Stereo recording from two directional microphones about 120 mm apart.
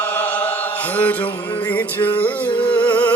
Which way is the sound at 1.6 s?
15° left (ahead or behind).